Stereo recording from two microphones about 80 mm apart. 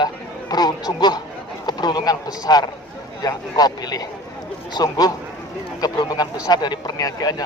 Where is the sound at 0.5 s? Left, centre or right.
Left.